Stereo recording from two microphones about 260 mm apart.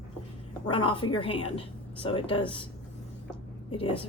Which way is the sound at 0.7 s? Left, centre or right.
Centre.